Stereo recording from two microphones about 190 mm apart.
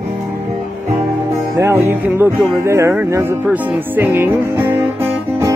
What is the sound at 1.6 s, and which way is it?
Music, 10° right (ahead or behind).